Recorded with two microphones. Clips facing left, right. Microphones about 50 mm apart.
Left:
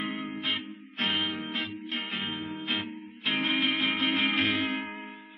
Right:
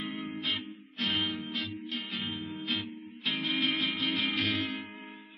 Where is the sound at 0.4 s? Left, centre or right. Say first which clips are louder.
Left 2 dB; left.